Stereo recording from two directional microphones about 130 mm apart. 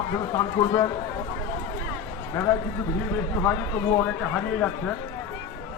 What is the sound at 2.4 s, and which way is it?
Speech, 20° left (ahead or behind).